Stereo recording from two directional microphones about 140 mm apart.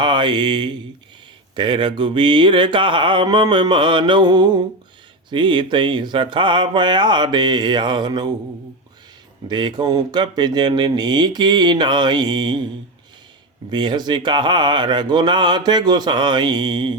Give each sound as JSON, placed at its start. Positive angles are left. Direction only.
{"t": 0.0, "sound": "speech", "side_deg": -35}
{"t": 9.5, "sound": "speech", "side_deg": -30}
{"t": 13.7, "sound": "speech", "side_deg": -30}